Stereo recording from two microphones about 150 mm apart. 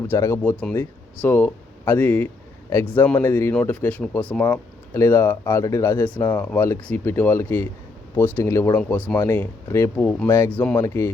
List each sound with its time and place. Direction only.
0.1 s speech: 15° left (ahead or behind)